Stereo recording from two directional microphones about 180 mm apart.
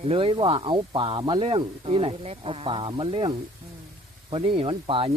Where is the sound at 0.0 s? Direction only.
30° right (ahead or behind).